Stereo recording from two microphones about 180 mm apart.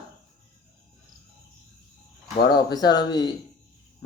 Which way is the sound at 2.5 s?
20° left (ahead or behind).